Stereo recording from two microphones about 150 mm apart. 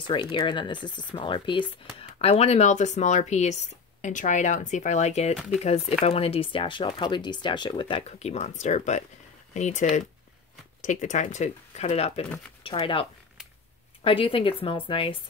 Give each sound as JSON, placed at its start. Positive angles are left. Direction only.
{"t": 0.0, "sound": "speech", "side_deg": 35}
{"t": 8.2, "sound": "speech", "side_deg": 45}
{"t": 14.0, "sound": "speech", "side_deg": 35}